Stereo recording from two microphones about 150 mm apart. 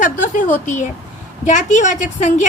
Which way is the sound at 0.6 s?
55° left (ahead or behind).